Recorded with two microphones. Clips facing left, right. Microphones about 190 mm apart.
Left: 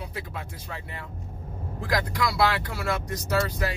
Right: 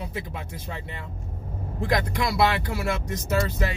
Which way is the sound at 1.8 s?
25° right (ahead or behind).